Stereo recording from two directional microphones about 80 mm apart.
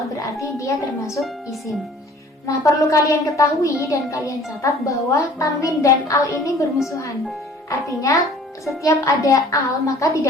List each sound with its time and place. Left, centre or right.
0.2 s a woman's voice: left
2.5 s a woman's voice: left
7.7 s a child's voice: left